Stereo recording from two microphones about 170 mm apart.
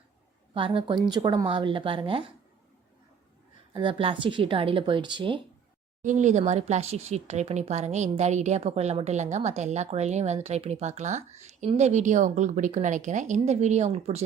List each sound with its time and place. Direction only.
0.5 s a woman's voice: 30° right (ahead or behind)
3.7 s a woman's voice: 30° right (ahead or behind)
6.0 s speech: 45° right (ahead or behind)